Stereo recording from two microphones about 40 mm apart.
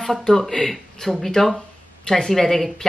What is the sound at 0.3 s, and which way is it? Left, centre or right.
Speech, centre.